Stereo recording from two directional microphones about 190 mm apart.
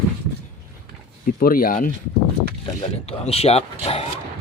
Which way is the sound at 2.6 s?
25° left (ahead or behind).